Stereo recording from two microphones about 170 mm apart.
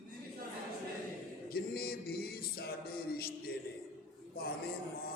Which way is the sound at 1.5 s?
65° left (ahead or behind).